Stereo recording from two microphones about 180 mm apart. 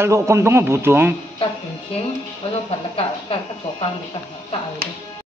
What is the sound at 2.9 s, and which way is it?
Speech, 30° left (ahead or behind).